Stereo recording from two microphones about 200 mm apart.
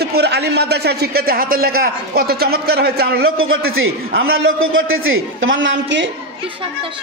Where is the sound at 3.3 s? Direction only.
90° right; by 6.1 s 65° right (ahead or behind).